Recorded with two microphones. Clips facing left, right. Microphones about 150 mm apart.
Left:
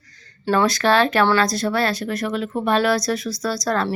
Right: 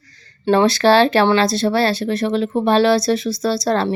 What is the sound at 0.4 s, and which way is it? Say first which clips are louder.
Speech: right 5 dB; 30° right (ahead or behind).